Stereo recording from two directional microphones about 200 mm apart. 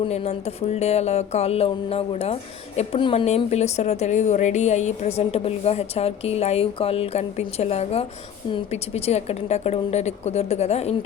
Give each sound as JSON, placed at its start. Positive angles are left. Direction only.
{"t": 0.0, "sound": "speech", "side_deg": 30}